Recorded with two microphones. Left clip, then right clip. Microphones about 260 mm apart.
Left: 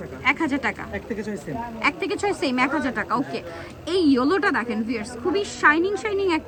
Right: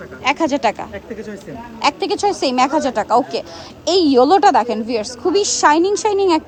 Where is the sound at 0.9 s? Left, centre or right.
Centre.